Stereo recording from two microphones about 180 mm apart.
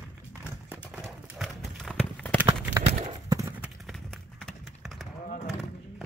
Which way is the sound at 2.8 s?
25° right (ahead or behind).